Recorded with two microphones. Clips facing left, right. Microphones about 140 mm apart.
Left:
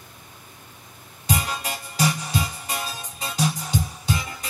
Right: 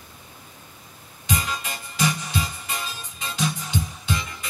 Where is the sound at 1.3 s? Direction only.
40° left (ahead or behind).